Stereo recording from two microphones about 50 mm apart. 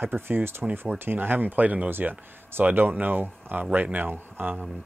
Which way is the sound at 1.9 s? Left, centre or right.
Right.